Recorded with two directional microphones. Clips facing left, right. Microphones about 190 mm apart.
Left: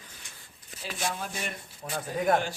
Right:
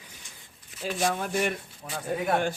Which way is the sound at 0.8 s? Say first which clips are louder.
Right 6 dB; 60° right (ahead or behind).